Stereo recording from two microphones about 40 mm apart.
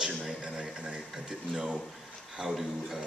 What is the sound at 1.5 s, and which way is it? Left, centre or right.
Speech, centre.